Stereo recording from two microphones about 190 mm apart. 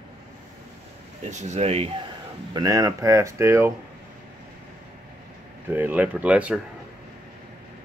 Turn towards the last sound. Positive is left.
turn(degrees=-5)  # may be behind; listen again after turning